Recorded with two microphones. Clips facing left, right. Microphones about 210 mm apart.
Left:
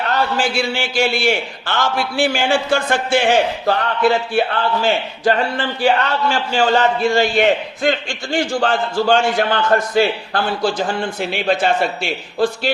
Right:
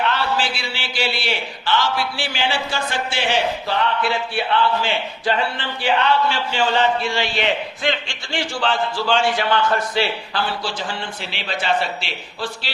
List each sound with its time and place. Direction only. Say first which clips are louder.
0.0 s a man's voice: left 3 dB; 45° left (ahead or behind)